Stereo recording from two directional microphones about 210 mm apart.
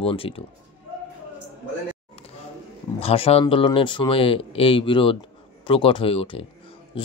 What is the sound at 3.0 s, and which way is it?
Speech, 30° left (ahead or behind).